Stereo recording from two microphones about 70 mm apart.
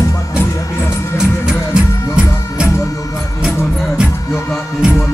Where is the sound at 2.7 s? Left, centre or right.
Left.